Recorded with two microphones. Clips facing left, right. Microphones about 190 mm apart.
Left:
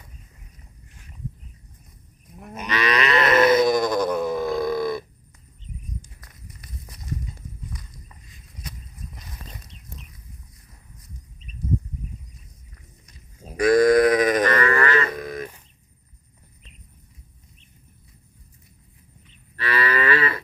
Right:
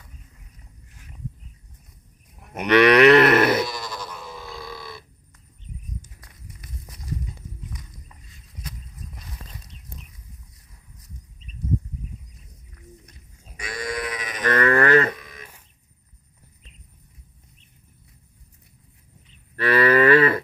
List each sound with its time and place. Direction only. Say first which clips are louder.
2.6 s livestock: right 10 dB; 65° right (ahead or behind)
3.6 s grunt: left 11 dB; 50° left (ahead or behind)
13.7 s sheep: left 15 dB; 40° left (ahead or behind)
14.4 s livestock: right 1 dB; 50° right (ahead or behind)
15.1 s a sound: left 13 dB; 45° left (ahead or behind)
19.5 s moo: right 7 dB; 50° right (ahead or behind)